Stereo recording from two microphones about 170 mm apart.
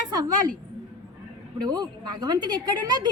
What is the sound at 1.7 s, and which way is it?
Speech, 25° right (ahead or behind).